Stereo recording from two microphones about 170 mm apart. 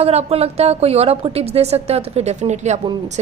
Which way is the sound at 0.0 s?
35° right (ahead or behind).